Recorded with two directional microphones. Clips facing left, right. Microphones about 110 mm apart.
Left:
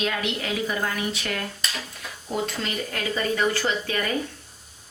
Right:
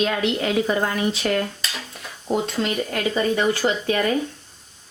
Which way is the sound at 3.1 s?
20° right (ahead or behind).